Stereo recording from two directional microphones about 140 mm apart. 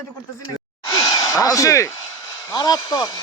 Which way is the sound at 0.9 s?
25° left (ahead or behind).